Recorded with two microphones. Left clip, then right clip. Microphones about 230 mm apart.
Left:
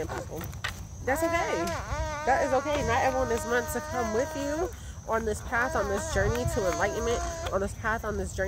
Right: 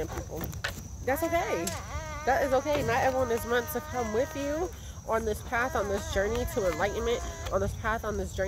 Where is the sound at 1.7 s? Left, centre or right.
Left.